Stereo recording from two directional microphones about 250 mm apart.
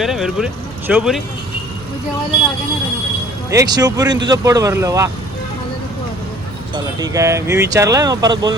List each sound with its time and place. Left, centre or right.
0.0 s speech: centre
3.5 s speech: centre
7.0 s speech: centre